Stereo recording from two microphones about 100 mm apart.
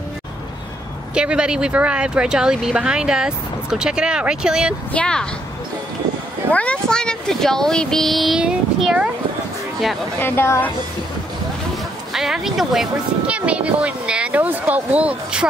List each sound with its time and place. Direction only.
1.1 s speech: 10° right (ahead or behind)
4.9 s speech: 10° left (ahead or behind)
6.5 s speech: 10° left (ahead or behind); by 8.9 s 5° right (ahead or behind)
10.2 s a woman's voice: 25° left (ahead or behind)
12.1 s speech: 5° right (ahead or behind)